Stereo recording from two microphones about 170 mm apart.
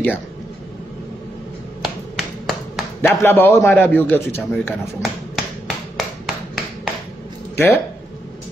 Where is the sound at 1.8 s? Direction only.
Centre (ahead or behind).